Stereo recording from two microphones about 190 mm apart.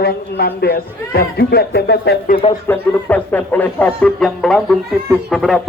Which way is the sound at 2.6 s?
10° left (ahead or behind).